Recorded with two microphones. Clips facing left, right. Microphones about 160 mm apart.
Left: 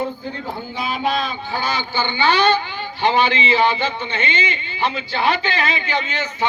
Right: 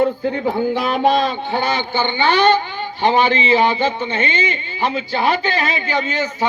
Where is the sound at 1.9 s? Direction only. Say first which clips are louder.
Left 1 dB; 55° right (ahead or behind).